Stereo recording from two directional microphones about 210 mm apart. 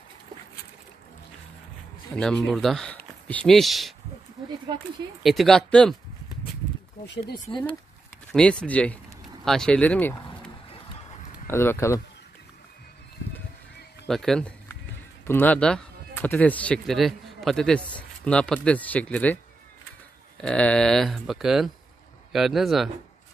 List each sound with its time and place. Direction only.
2.1 s speech: centre (ahead or behind)
5.2 s speech: centre (ahead or behind)
7.4 s speech: 25° left (ahead or behind)
8.3 s speech: 5° left (ahead or behind)
14.0 s speech: centre (ahead or behind)
20.3 s speech: 5° left (ahead or behind)